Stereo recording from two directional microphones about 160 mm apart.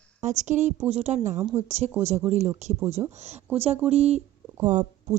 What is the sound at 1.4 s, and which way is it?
Speech, 10° right (ahead or behind).